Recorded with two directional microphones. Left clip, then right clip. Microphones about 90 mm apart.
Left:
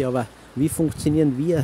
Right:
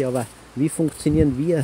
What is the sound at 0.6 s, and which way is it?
Speech, 15° left (ahead or behind).